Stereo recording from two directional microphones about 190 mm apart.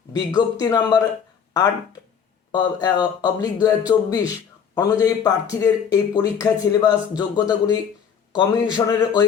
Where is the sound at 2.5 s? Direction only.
20° left (ahead or behind).